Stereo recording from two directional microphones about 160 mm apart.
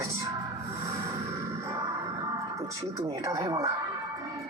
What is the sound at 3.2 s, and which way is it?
Speech, 25° right (ahead or behind).